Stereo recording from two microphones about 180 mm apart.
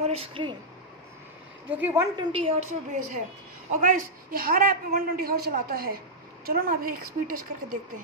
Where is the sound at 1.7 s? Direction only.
10° right (ahead or behind).